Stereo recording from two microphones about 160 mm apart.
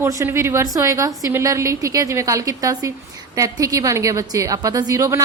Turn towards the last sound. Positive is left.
turn(degrees=-20)  # may be behind; listen again after turning